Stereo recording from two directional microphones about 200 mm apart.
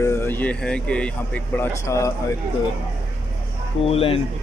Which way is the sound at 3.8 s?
30° left (ahead or behind).